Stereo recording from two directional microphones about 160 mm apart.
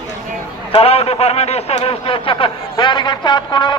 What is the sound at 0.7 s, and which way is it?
A man's voice, 35° left (ahead or behind).